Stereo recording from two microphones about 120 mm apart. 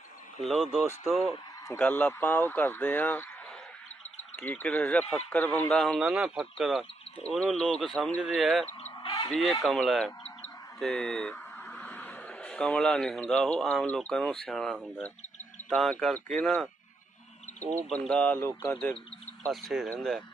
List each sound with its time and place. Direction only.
0.4 s speech: 5° right (ahead or behind)
1.8 s speech: 10° left (ahead or behind)
4.4 s speech: 10° left (ahead or behind)
6.1 s speech: 5° right (ahead or behind)
7.3 s speech: 10° left (ahead or behind)
9.0 s a sound: 40° left (ahead or behind)
9.3 s speech: centre (ahead or behind)
11.3 s a sound: 15° left (ahead or behind)
12.3 s speech: 5° left (ahead or behind)
17.6 s speech: 25° right (ahead or behind)
17.8 s speech: 5° left (ahead or behind)
19.5 s speech: centre (ahead or behind)